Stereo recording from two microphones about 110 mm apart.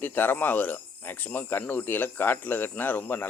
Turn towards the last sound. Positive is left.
turn(degrees=15)  # may be behind; listen again after turning